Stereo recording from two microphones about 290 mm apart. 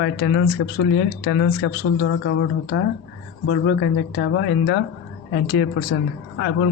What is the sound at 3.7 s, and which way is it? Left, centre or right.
Speech, left.